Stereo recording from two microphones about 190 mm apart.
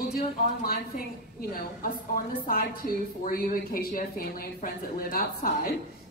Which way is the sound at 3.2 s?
50° left (ahead or behind).